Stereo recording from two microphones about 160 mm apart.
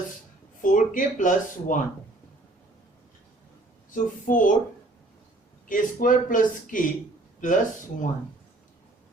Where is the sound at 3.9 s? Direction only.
55° left (ahead or behind).